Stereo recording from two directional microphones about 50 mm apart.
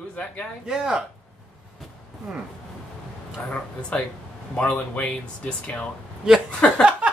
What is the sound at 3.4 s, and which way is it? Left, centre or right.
Speech, left.